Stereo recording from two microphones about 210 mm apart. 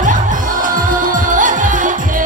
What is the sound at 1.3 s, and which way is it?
Music, 40° right (ahead or behind).